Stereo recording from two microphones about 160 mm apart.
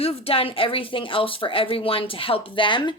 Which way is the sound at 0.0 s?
35° left (ahead or behind).